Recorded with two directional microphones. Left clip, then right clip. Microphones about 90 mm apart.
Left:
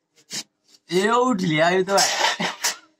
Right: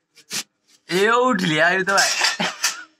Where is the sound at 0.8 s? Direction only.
5° right (ahead or behind).